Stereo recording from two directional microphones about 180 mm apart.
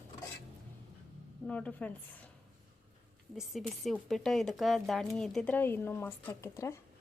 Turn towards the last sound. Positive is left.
turn(degrees=15)  # may be behind; listen again after turning